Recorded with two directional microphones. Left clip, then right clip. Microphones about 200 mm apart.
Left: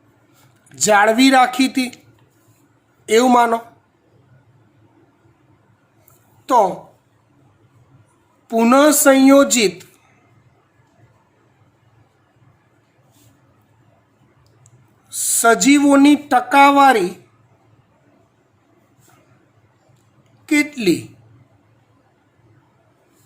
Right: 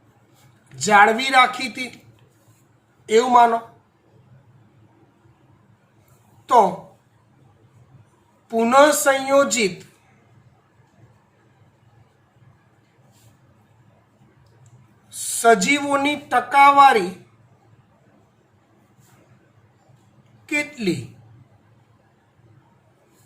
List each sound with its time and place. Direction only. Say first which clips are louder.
0.8 s speech: left 2 dB; 60° left (ahead or behind)
3.1 s speech: left 1 dB; 60° left (ahead or behind)
6.4 s a sound: left 1 dB; 60° left (ahead or behind)
8.4 s speech: left 1 dB; 60° left (ahead or behind)
15.4 s speech: left 3 dB; 60° left (ahead or behind)
20.5 s speech: left 6 dB; 60° left (ahead or behind)